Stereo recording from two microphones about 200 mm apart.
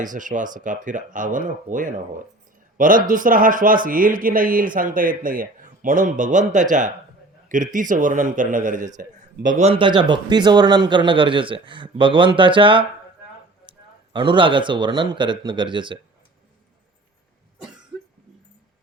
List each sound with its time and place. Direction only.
0.0 s a man's voice: 40° right (ahead or behind); by 16.0 s 25° right (ahead or behind)